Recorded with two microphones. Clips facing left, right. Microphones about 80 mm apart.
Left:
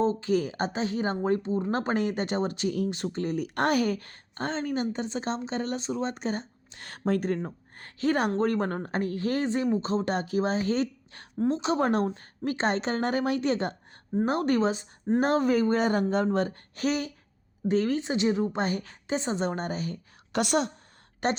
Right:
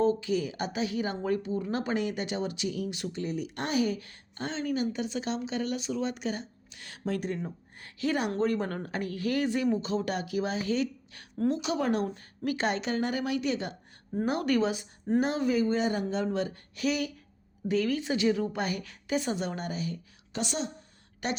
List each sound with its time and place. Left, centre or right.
0.0 s speech: left
15.3 s a woman's voice: left
20.3 s a woman's voice: left
21.2 s speech: left